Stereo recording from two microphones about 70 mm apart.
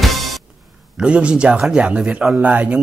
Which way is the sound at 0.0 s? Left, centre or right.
Centre.